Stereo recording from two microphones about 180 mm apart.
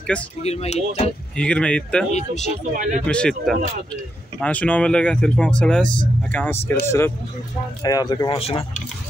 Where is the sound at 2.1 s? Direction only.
40° left (ahead or behind).